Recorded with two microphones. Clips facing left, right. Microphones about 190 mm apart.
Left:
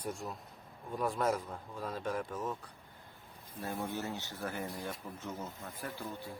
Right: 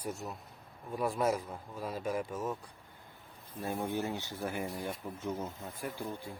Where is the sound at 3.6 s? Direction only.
15° right (ahead or behind).